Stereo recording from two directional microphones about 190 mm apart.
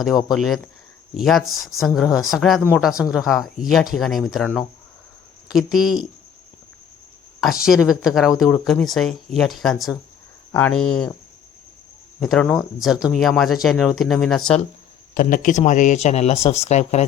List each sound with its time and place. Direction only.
0.3 s speech: centre (ahead or behind)
7.6 s speech: 5° right (ahead or behind)
12.2 s speech: 5° left (ahead or behind)
15.1 s speech: 45° left (ahead or behind)